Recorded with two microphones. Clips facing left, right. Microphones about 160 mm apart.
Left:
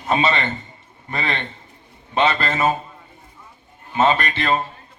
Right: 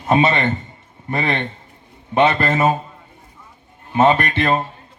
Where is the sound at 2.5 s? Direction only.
20° right (ahead or behind).